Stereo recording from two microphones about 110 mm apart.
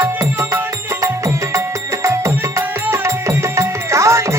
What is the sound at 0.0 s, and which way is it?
Music, 25° right (ahead or behind).